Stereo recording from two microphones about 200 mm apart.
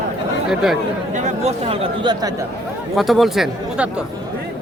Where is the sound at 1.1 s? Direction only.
30° right (ahead or behind).